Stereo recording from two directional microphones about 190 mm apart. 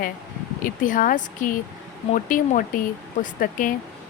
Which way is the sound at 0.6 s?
45° left (ahead or behind).